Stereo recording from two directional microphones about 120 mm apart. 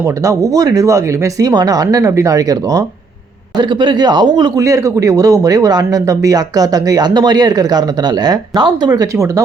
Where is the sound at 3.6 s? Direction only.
40° right (ahead or behind).